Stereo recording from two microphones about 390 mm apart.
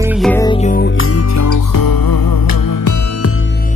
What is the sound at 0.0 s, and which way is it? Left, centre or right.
Music, centre.